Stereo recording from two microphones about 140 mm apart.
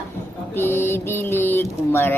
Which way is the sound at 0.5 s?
15° left (ahead or behind).